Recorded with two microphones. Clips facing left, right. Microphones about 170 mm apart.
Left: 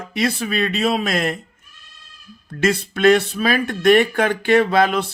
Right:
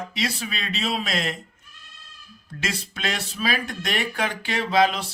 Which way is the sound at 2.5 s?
55° left (ahead or behind).